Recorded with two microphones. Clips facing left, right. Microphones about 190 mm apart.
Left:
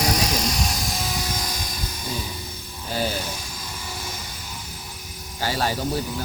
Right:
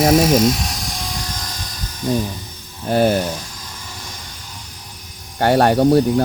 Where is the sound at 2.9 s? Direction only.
55° right (ahead or behind).